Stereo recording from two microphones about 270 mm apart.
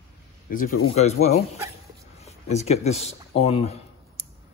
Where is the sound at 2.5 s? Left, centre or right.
Left.